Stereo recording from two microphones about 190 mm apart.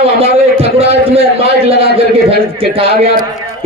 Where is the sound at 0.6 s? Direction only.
30° right (ahead or behind).